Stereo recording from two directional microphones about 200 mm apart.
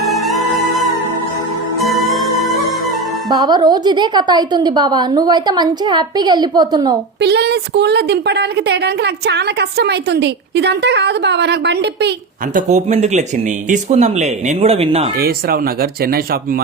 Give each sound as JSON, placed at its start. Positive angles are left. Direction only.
{"t": 0.1, "sound": "music", "side_deg": 0}
{"t": 1.8, "sound": "music", "side_deg": 0}
{"t": 3.2, "sound": "a woman's voice", "side_deg": -20}
{"t": 7.2, "sound": "a woman's voice", "side_deg": -55}
{"t": 12.5, "sound": "speech", "side_deg": -35}
{"t": 15.2, "sound": "speech", "side_deg": -50}